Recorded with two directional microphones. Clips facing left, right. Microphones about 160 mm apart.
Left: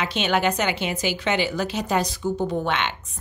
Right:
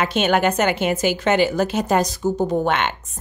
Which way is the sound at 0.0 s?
50° right (ahead or behind).